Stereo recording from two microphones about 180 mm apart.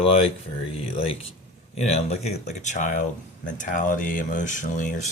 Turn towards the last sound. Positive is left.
turn(degrees=45)  # may be behind; listen again after turning